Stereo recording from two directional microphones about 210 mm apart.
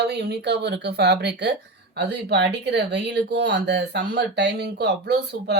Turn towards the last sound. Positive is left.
turn(degrees=-50)  # may be behind; listen again after turning